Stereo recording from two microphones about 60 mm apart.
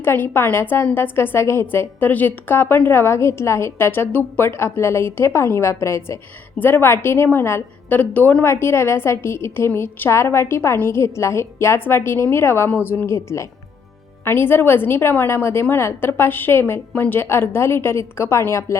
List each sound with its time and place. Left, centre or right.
0.0 s a woman's voice: left
6.6 s a woman's voice: left
7.9 s a woman's voice: left
13.1 s a woman's voice: left
14.3 s a woman's voice: left